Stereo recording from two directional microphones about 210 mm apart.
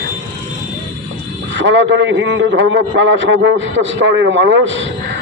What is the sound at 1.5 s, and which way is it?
A man's voice, 60° right (ahead or behind).